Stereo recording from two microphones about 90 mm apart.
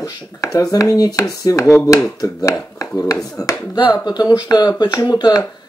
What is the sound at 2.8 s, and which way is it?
Speech, 40° left (ahead or behind).